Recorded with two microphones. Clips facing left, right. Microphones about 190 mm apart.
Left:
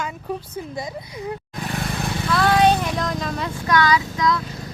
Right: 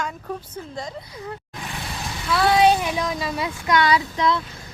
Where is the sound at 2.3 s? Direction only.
5° right (ahead or behind).